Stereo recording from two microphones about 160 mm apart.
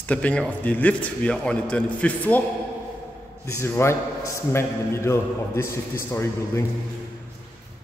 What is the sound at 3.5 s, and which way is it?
A man's voice, 15° left (ahead or behind).